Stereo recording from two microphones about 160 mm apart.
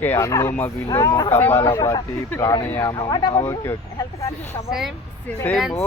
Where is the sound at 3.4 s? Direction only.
15° left (ahead or behind).